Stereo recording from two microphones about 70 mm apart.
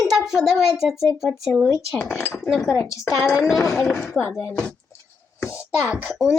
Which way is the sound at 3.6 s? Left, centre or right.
Left.